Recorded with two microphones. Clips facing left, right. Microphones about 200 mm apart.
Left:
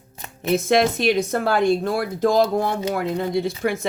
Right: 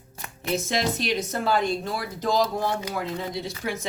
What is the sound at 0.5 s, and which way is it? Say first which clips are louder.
Speech: left 8 dB; 60° left (ahead or behind).